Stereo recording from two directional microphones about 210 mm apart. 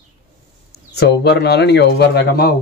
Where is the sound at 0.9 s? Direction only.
55° left (ahead or behind).